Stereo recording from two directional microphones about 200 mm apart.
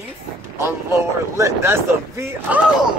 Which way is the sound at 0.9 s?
15° right (ahead or behind).